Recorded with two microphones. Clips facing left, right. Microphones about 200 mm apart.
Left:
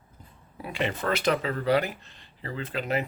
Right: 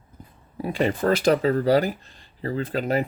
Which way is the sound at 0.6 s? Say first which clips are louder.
Right 7 dB; 35° right (ahead or behind).